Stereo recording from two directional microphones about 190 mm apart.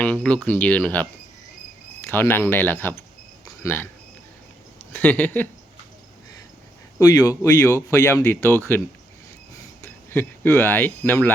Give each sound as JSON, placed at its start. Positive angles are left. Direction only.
{"t": 0.0, "sound": "speech", "side_deg": 5}
{"t": 2.0, "sound": "speech", "side_deg": 10}
{"t": 3.4, "sound": "a sound", "side_deg": 15}
{"t": 4.9, "sound": "speech", "side_deg": 10}
{"t": 7.0, "sound": "speech", "side_deg": 20}
{"t": 9.8, "sound": "speech", "side_deg": 10}